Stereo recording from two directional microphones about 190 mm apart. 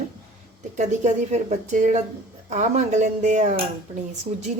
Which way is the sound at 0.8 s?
40° right (ahead or behind).